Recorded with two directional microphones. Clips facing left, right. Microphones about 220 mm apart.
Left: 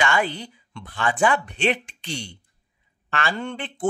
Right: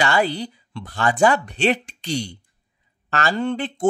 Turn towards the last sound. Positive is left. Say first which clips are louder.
# right 7 dB
turn(degrees=-40)  # may be behind; listen again after turning